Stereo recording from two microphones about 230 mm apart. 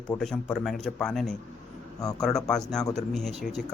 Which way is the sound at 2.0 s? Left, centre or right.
Centre.